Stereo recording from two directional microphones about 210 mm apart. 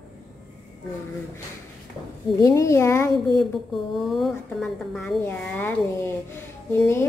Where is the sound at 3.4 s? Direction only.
Centre (ahead or behind).